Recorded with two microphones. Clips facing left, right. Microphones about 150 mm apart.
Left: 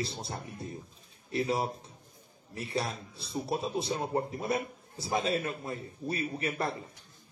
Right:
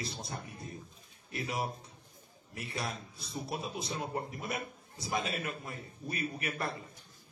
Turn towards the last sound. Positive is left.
turn(degrees=30)  # may be behind; listen again after turning